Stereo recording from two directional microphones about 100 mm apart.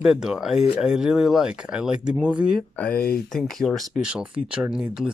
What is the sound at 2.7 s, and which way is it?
Speech, 15° left (ahead or behind).